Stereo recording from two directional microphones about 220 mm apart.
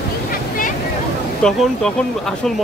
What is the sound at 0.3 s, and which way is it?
Vehicle, 40° left (ahead or behind).